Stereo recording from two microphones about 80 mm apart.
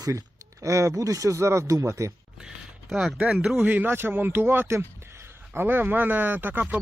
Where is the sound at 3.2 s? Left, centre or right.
Centre.